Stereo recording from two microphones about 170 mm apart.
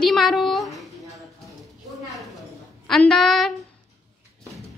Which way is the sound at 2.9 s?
5° left (ahead or behind).